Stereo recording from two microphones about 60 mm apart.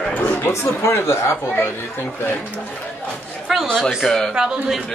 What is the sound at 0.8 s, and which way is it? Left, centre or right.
Speech, left.